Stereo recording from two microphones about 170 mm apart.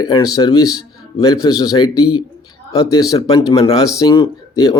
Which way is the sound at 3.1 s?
20° left (ahead or behind).